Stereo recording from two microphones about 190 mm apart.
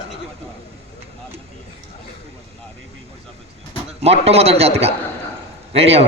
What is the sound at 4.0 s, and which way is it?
A man's voice, 30° right (ahead or behind).